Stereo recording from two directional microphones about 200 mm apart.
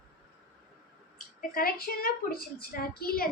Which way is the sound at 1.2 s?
45° left (ahead or behind).